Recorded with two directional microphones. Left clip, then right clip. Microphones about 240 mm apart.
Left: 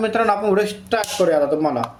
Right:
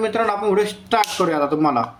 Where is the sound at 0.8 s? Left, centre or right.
Right.